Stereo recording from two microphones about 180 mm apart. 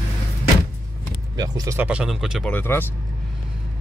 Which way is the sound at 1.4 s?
20° right (ahead or behind).